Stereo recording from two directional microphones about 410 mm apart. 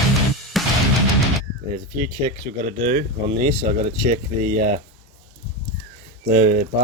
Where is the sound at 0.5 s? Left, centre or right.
Centre.